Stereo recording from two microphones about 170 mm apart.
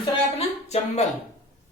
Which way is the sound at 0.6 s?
40° left (ahead or behind).